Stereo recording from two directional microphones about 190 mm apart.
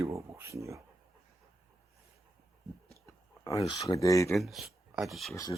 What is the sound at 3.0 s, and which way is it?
Speech, 20° left (ahead or behind).